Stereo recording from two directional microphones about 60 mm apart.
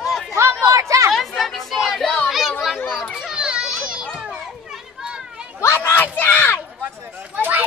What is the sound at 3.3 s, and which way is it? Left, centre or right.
Children playing, centre.